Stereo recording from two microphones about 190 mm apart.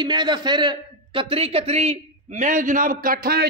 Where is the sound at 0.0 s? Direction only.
25° right (ahead or behind).